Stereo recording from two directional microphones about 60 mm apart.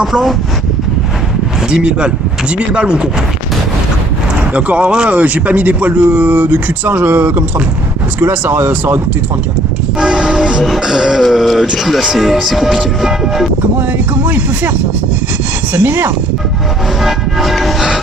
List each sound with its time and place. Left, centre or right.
0.0 s speech: centre
1.7 s speech: centre
4.5 s speech: right
10.0 s speech: centre
14.3 s speech: right
17.0 s train: centre